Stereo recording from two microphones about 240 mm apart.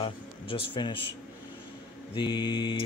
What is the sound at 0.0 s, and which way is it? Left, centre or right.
Speech, left.